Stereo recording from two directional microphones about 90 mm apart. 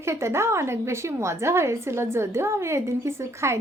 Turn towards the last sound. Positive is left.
turn(degrees=-30)  # may be behind; listen again after turning